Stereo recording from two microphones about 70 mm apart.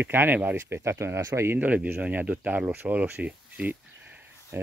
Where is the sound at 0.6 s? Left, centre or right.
Right.